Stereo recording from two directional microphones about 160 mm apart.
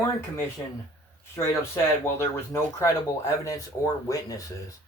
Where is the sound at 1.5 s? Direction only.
15° left (ahead or behind).